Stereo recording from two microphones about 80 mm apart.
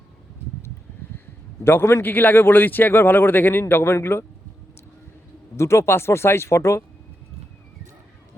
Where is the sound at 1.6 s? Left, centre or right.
Left.